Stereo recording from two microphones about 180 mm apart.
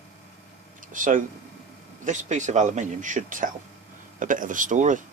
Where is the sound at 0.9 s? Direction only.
45° right (ahead or behind).